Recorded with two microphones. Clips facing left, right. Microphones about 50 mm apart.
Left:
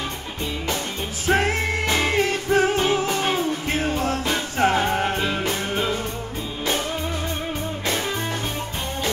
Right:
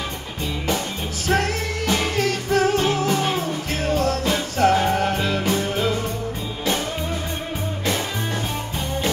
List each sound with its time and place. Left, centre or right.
1.3 s music: left